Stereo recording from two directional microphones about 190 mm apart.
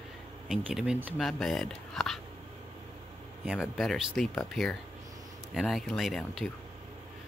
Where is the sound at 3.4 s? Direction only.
5° right (ahead or behind).